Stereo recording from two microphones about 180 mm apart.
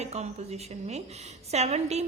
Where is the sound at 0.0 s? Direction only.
35° right (ahead or behind).